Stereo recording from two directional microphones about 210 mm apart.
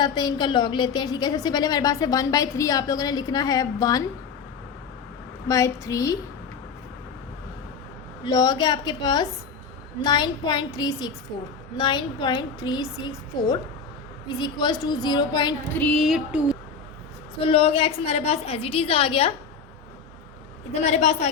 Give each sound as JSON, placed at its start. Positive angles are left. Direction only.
{"t": 0.0, "sound": "a woman's voice", "side_deg": 20}
{"t": 5.5, "sound": "a woman's voice", "side_deg": 15}
{"t": 8.2, "sound": "a woman's voice", "side_deg": 20}
{"t": 15.8, "sound": "a sound", "side_deg": 0}
{"t": 17.4, "sound": "a woman's voice", "side_deg": 25}
{"t": 20.8, "sound": "a woman's voice", "side_deg": 30}